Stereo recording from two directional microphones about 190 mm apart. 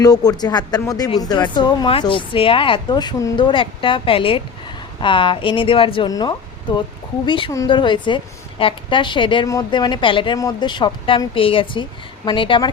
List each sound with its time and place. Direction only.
0.0 s a woman's voice: 20° left (ahead or behind)